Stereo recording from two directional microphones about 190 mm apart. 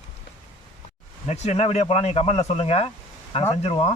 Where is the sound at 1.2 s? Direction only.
35° left (ahead or behind).